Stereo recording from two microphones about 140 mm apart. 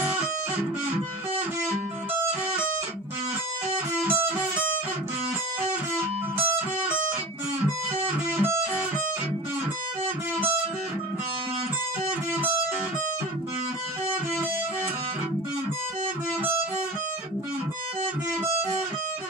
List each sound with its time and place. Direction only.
3.7 s music: 10° right (ahead or behind)
8.0 s music: 15° right (ahead or behind)